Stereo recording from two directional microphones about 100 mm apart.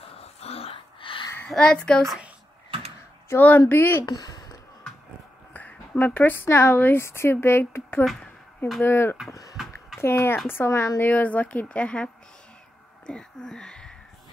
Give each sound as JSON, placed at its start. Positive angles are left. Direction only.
{"t": 0.1, "sound": "a sound", "side_deg": 90}
{"t": 1.5, "sound": "a woman's voice", "side_deg": 10}
{"t": 3.3, "sound": "speech", "side_deg": 20}
{"t": 4.0, "sound": "speech", "side_deg": 40}
{"t": 5.5, "sound": "speech", "side_deg": 15}
{"t": 11.0, "sound": "a woman's voice", "side_deg": 15}
{"t": 13.0, "sound": "a sound", "side_deg": 10}